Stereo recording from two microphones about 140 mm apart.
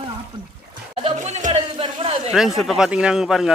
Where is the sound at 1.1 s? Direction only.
55° right (ahead or behind).